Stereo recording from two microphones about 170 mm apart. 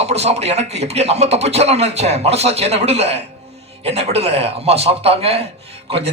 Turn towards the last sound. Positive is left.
turn(degrees=-35)  # may be behind; listen again after turning